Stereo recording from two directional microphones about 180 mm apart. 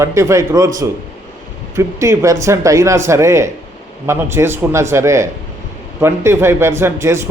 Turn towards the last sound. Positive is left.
turn(degrees=-15)  # may be behind; listen again after turning